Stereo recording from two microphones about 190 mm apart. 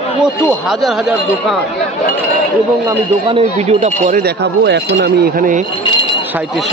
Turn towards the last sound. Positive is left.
turn(degrees=-45)  # may be behind; listen again after turning